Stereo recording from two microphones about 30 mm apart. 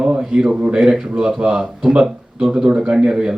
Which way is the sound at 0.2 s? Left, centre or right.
Right.